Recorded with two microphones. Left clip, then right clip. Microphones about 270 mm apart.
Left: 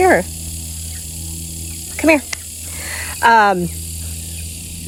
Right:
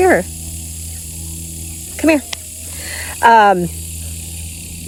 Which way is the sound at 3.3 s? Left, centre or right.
Centre.